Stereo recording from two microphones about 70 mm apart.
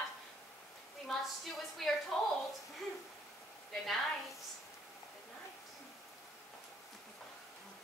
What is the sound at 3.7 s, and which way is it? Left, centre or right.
Speech, centre.